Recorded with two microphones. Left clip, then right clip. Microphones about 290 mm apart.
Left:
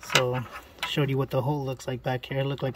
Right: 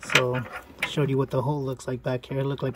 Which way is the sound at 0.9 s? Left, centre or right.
Centre.